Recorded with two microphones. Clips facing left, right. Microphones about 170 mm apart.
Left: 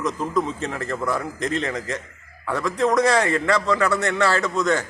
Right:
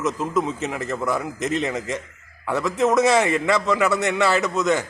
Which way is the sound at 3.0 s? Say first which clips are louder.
Right 1 dB; 20° right (ahead or behind).